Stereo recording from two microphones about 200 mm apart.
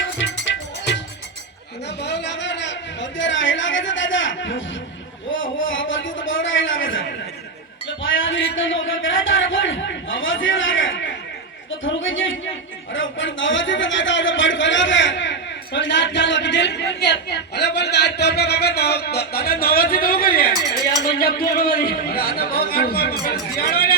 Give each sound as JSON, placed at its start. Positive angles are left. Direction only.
{"t": 0.2, "sound": "music", "side_deg": 65}
{"t": 2.0, "sound": "a sound", "side_deg": 60}
{"t": 8.0, "sound": "a man's voice", "side_deg": 75}